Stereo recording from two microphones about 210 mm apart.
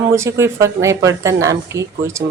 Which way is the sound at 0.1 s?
15° right (ahead or behind).